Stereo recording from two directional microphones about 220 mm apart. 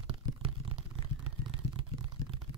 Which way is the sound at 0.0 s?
25° right (ahead or behind).